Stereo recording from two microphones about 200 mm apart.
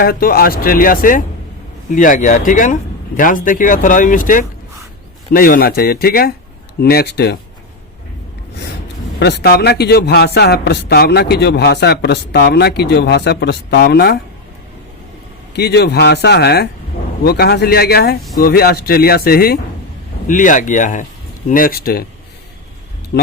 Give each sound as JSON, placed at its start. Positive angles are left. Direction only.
{"t": 0.0, "sound": "speech", "side_deg": 50}
{"t": 9.1, "sound": "a man's voice", "side_deg": 55}
{"t": 15.5, "sound": "a man's voice", "side_deg": 55}